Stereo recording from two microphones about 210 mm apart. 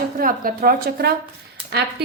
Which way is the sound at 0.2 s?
40° right (ahead or behind).